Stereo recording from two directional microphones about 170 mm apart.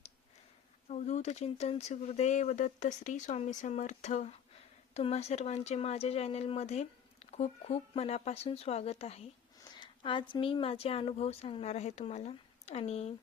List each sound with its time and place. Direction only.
0.9 s speech: 45° left (ahead or behind)
9.6 s speech: 25° left (ahead or behind)